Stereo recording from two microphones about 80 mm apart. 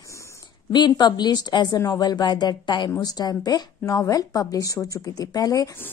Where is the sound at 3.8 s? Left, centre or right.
Left.